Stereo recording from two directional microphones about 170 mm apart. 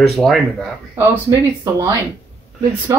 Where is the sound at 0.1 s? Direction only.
Centre (ahead or behind).